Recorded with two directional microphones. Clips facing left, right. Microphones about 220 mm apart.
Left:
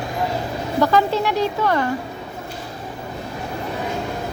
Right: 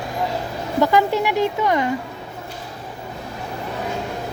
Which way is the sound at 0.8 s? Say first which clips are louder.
Even; 15° right (ahead or behind).